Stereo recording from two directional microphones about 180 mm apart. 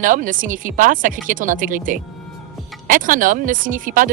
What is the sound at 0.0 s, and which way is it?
Speech, 45° right (ahead or behind).